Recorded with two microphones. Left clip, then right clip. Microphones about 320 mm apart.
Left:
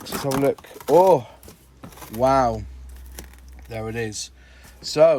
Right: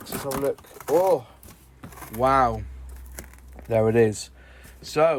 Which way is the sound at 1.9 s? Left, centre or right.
Centre.